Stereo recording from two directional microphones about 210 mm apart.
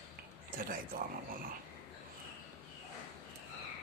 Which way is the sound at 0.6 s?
40° right (ahead or behind).